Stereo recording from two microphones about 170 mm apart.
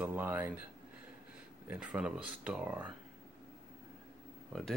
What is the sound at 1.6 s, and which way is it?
Speech, 5° right (ahead or behind).